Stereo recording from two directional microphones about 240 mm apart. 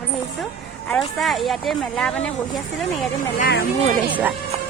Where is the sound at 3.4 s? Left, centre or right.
Left.